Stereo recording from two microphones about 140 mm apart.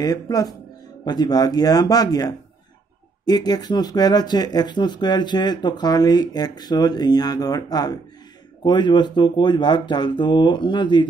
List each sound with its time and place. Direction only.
0.0 s speech: 25° left (ahead or behind)